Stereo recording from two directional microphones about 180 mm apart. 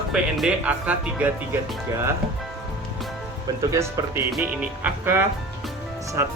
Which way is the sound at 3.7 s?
15° right (ahead or behind).